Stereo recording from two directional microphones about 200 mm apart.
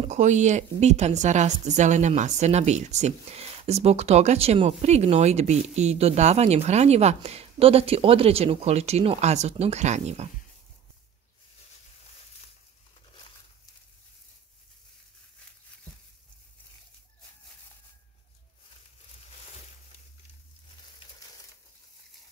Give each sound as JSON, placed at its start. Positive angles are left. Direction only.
{"t": 0.1, "sound": "speech", "side_deg": -35}